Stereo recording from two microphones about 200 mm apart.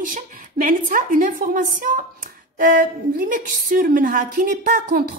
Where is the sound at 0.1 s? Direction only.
40° right (ahead or behind).